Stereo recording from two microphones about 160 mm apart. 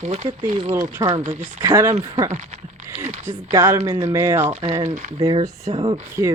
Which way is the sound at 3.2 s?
15° right (ahead or behind).